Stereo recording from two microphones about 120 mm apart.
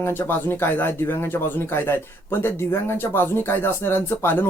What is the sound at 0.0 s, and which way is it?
Speech, 15° left (ahead or behind).